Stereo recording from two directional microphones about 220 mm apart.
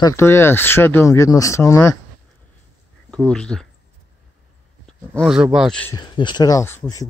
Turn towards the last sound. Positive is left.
turn(degrees=10)  # may be behind; listen again after turning